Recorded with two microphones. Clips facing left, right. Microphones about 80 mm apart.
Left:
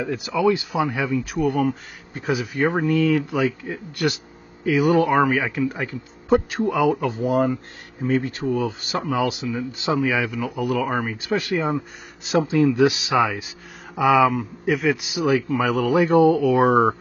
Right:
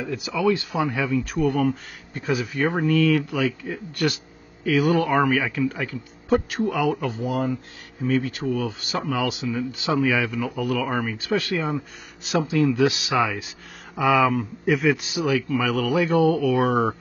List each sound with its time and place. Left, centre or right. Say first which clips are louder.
0.3 s speech: left 2 dB; centre
4.6 s speech: left 2 dB; left
7.2 s speech: left 6 dB; left
8.0 s speech: left 1 dB; left
9.9 s speech: right 1 dB; centre
15.0 s speech: left 3 dB; centre